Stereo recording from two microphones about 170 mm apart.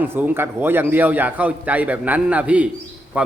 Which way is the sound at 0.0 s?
10° right (ahead or behind).